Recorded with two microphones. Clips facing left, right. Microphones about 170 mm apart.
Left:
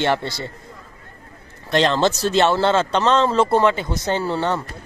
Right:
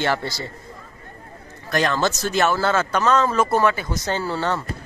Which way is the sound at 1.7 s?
25° left (ahead or behind).